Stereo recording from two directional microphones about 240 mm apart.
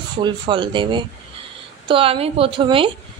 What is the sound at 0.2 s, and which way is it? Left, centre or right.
A woman's voice, centre.